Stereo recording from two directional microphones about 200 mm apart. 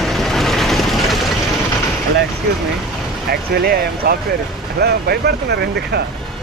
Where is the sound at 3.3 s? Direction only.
50° right (ahead or behind).